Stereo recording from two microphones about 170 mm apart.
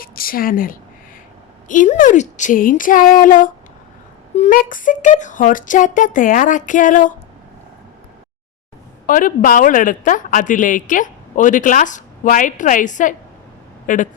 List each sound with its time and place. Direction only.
0.0 s a woman's voice: 60° left (ahead or behind)
9.0 s a woman's voice: 55° left (ahead or behind)